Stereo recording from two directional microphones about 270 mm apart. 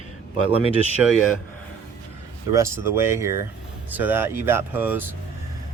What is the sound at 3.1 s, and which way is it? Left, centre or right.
Speech, centre.